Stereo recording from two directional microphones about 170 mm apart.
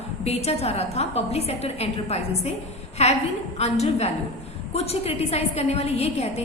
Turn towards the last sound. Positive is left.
turn(degrees=40)  # may be behind; listen again after turning